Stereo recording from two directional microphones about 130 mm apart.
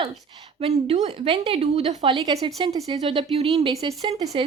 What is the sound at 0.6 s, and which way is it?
Speech, 55° right (ahead or behind).